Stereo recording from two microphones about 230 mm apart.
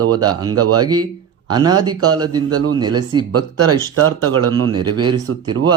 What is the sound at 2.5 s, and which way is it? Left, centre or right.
Speech, right.